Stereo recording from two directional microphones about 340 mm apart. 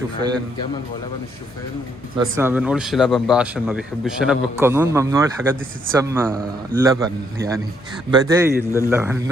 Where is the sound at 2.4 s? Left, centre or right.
Centre.